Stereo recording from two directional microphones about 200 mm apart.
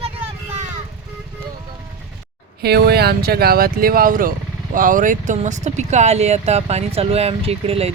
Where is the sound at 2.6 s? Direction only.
55° right (ahead or behind).